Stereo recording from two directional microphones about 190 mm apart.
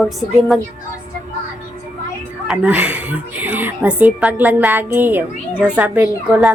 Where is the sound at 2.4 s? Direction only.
5° right (ahead or behind).